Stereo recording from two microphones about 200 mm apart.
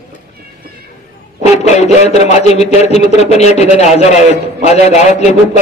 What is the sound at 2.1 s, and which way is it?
A man's voice, 35° left (ahead or behind).